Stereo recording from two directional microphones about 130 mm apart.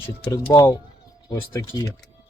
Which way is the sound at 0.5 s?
30° left (ahead or behind).